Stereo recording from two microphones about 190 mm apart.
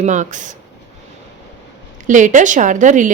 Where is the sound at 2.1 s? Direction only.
40° right (ahead or behind).